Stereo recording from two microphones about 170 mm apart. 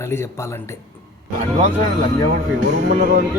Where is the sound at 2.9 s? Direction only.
60° right (ahead or behind).